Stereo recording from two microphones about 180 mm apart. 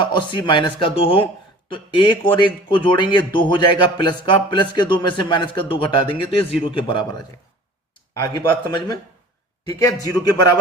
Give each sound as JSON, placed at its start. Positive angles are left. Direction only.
{"t": 0.0, "sound": "speech", "side_deg": 25}
{"t": 8.3, "sound": "speech", "side_deg": 20}